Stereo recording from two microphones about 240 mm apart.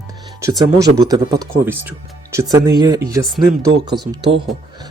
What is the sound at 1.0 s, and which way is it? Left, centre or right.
Speech, centre.